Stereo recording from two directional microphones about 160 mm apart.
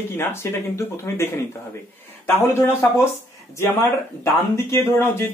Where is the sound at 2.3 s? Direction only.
15° left (ahead or behind).